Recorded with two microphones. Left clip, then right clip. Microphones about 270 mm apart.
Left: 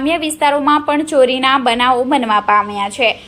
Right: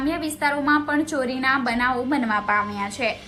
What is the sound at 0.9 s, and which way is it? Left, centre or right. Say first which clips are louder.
A woman's voice: left 12 dB; left.